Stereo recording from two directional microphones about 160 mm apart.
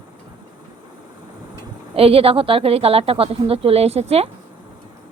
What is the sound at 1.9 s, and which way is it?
Speech, 35° right (ahead or behind).